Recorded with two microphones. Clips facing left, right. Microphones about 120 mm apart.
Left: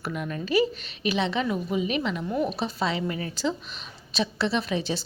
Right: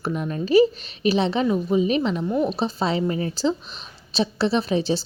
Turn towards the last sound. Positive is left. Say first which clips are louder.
# right 6 dB
turn(degrees=-35)  # may be behind; listen again after turning